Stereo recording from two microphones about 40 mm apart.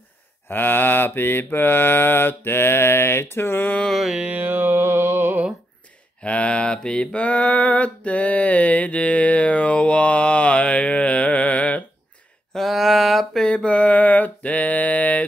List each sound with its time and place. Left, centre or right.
0.5 s mantra: left
4.3 s mantra: right
6.2 s mantra: left
7.2 s mantra: left
12.5 s a sound: centre
13.5 s mantra: left